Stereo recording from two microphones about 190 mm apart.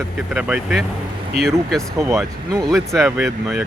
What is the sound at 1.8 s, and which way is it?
Speech, 15° right (ahead or behind).